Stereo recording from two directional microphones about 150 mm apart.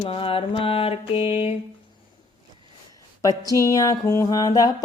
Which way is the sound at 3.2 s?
25° left (ahead or behind).